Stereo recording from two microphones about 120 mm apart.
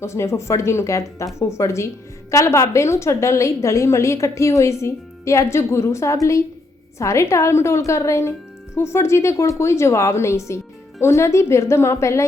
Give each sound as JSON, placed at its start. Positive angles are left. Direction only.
{"t": 0.0, "sound": "a woman's voice", "side_deg": 25}